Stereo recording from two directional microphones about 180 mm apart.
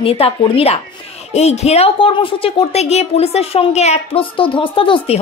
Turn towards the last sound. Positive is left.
turn(degrees=30)  # may be behind; listen again after turning